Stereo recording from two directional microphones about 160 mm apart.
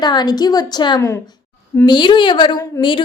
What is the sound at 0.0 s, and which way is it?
A woman's voice, 25° left (ahead or behind).